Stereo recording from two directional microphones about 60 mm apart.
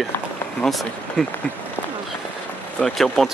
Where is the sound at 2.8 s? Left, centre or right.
Centre.